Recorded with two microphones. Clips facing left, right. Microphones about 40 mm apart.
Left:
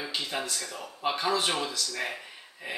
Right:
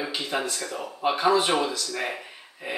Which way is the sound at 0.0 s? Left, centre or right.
Centre.